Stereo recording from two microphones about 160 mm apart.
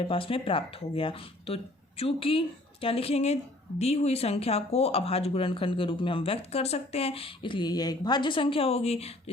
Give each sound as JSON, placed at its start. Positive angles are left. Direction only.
{"t": 0.1, "sound": "speech", "side_deg": 35}